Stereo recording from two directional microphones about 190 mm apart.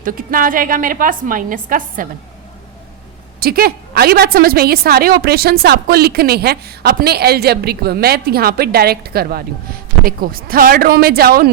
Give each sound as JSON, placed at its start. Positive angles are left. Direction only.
{"t": 0.0, "sound": "a woman's voice", "side_deg": -45}
{"t": 3.4, "sound": "a woman's voice", "side_deg": -55}